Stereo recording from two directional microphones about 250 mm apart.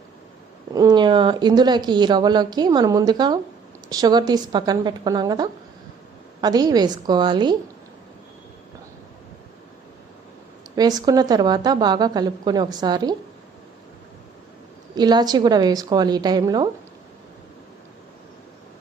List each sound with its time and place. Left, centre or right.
0.7 s speech: centre
10.8 s speech: centre
14.9 s speech: centre